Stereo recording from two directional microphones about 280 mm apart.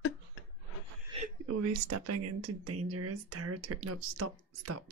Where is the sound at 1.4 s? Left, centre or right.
Right.